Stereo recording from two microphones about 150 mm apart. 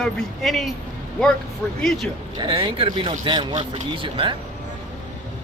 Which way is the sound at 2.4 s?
35° right (ahead or behind).